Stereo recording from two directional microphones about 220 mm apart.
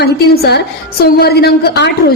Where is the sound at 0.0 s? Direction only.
50° left (ahead or behind).